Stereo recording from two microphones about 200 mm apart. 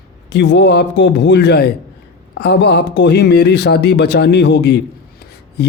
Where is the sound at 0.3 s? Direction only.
60° left (ahead or behind).